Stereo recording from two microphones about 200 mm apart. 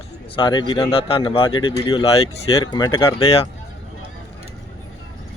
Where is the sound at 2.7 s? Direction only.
20° left (ahead or behind).